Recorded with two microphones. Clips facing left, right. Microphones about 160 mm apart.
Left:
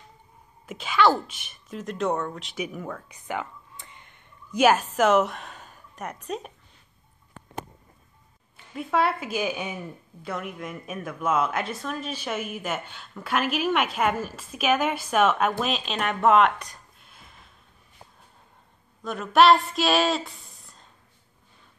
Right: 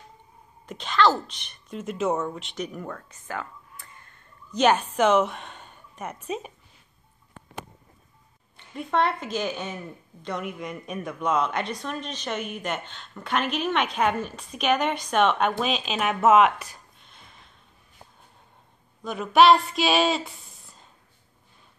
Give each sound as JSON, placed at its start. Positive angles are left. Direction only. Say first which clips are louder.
{"t": 0.7, "sound": "a woman's voice", "louder": "left 1 dB", "side_deg": 5}
{"t": 3.1, "sound": "whispering", "louder": "left 3 dB", "side_deg": 20}
{"t": 4.5, "sound": "a woman's voice", "louder": "left 1 dB", "side_deg": 5}
{"t": 8.5, "sound": "a woman's voice", "louder": "even", "side_deg": 5}
{"t": 19.0, "sound": "a sound", "louder": "right 1 dB", "side_deg": 0}